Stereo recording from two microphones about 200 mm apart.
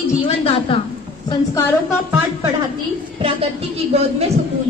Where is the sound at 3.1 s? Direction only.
30° right (ahead or behind).